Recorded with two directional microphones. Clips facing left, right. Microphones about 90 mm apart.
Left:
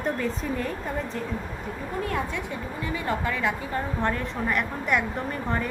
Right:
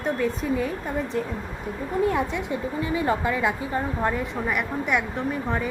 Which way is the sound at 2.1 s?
20° right (ahead or behind).